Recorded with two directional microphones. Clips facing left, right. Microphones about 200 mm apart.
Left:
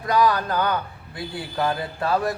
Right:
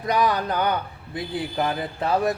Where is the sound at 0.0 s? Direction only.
20° right (ahead or behind).